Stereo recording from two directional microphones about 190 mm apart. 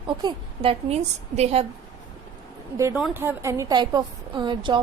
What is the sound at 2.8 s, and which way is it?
A woman's voice, 10° right (ahead or behind).